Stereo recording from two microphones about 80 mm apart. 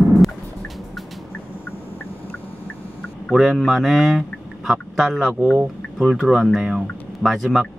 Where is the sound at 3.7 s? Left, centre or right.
Centre.